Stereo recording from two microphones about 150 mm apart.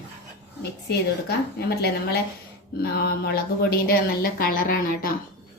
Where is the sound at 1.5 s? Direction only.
90° left; by 5.1 s 70° left (ahead or behind).